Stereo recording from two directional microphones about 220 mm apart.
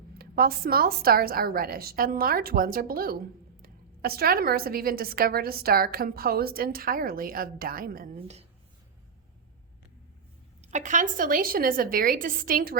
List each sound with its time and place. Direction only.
0.2 s a woman's voice: 45° right (ahead or behind)
10.6 s a woman's voice: 35° right (ahead or behind)